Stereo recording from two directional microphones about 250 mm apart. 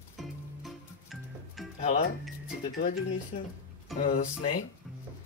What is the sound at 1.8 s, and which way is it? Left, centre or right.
Speech, left.